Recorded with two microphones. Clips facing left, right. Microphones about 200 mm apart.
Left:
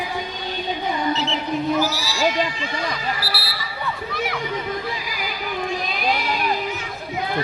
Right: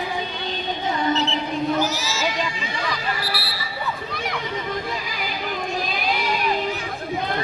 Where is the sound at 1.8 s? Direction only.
20° right (ahead or behind).